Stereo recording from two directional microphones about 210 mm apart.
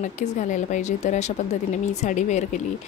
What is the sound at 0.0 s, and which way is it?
A woman's voice, 35° left (ahead or behind).